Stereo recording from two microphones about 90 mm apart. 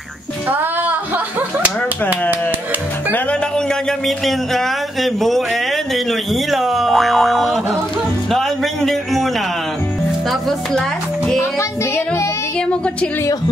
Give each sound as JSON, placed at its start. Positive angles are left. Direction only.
{"t": 4.3, "sound": "speech", "side_deg": 0}
{"t": 6.5, "sound": "speech", "side_deg": 0}
{"t": 8.3, "sound": "music", "side_deg": 5}